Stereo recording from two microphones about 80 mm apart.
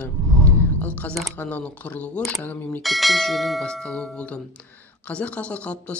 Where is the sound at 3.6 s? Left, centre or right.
Centre.